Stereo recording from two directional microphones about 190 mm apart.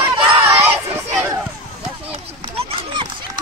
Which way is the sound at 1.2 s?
10° right (ahead or behind).